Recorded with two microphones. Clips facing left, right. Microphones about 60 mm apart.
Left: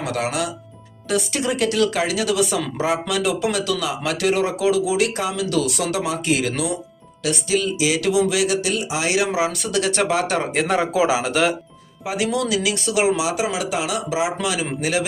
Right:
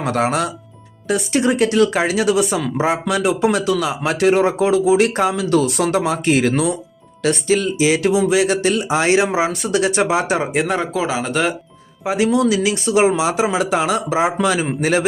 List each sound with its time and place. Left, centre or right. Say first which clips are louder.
0.0 s speech: right 5 dB; right
1.0 s speech: right 5 dB; right
10.5 s speech: right 2 dB; centre
10.8 s speech: left 2 dB; centre
12.0 s speech: right 6 dB; right